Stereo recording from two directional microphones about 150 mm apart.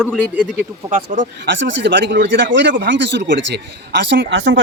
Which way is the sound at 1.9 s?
90° right.